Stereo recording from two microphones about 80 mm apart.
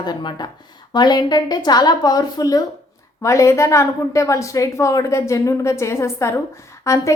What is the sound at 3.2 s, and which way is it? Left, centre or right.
A woman's voice, left.